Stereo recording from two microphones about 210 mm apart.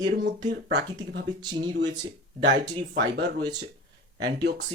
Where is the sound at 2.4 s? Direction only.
55° right (ahead or behind).